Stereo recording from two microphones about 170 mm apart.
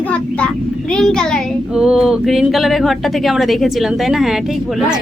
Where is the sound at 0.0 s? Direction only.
5° left (ahead or behind).